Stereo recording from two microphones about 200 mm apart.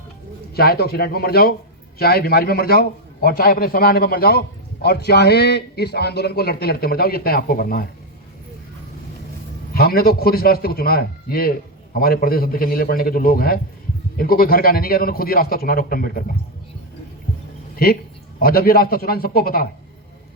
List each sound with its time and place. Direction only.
0.5 s a man's voice: 50° left (ahead or behind)
9.7 s a man's voice: 50° left (ahead or behind)
18.3 s a man's voice: 50° left (ahead or behind)